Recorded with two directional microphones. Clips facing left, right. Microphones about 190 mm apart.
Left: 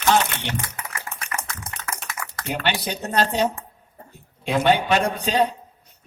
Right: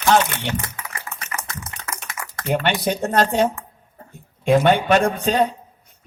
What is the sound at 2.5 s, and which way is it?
A man's voice, 50° right (ahead or behind).